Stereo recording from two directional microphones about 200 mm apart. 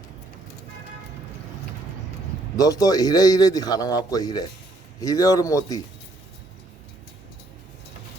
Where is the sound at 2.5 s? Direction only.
15° left (ahead or behind).